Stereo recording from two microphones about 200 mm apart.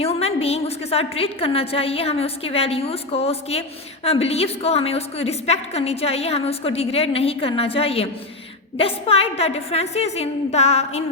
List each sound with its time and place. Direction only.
0.0 s a woman's voice: 30° left (ahead or behind)